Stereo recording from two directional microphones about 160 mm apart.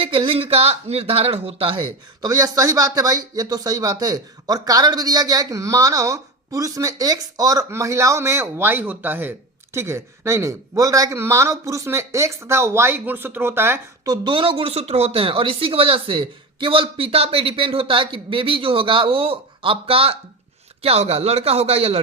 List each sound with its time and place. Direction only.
0.0 s speech: 35° right (ahead or behind)